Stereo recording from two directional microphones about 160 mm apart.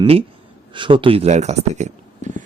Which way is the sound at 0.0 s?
35° right (ahead or behind).